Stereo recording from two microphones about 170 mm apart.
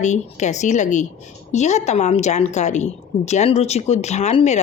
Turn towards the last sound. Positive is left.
turn(degrees=40)  # may be behind; listen again after turning